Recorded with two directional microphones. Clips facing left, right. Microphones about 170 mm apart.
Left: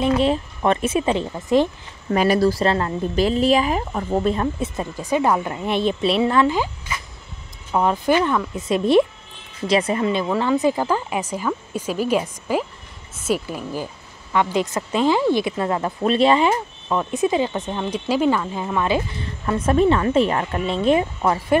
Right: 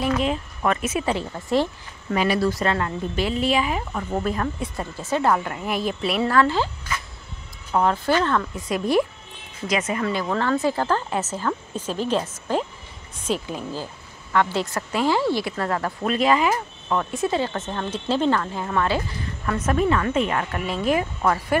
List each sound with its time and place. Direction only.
0.0 s a woman's voice: 30° left (ahead or behind)
2.0 s a woman's voice: 40° left (ahead or behind); by 6.7 s 15° left (ahead or behind)
7.7 s speech: 15° left (ahead or behind)
8.5 s a woman's voice: 25° left (ahead or behind)
10.2 s a woman's voice: 10° left (ahead or behind); by 16.5 s 30° left (ahead or behind)
16.9 s a woman's voice: 15° left (ahead or behind)